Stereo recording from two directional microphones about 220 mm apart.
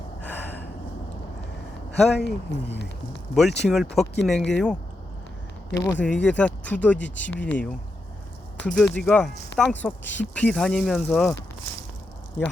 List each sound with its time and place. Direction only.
2.0 s speech: centre (ahead or behind)
2.2 s speech: 50° left (ahead or behind)
3.3 s speech: centre (ahead or behind)